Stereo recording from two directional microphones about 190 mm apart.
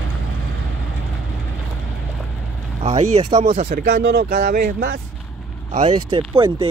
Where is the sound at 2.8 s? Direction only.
35° right (ahead or behind).